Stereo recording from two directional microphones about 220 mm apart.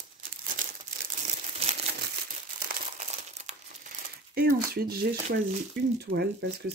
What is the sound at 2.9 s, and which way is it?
Crumpling, 30° right (ahead or behind).